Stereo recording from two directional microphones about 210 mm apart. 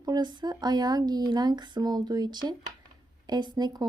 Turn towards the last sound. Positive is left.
turn(degrees=-20)  # may be behind; listen again after turning